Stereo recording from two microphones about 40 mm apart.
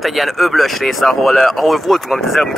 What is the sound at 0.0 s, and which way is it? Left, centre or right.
Speech, centre.